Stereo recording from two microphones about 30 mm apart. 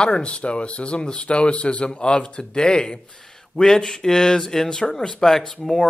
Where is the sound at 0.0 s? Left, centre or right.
Left.